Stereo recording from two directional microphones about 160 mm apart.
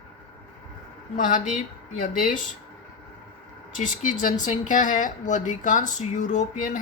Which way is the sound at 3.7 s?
55° left (ahead or behind).